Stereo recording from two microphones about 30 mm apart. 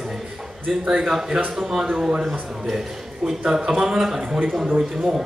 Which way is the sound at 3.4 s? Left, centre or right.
Right.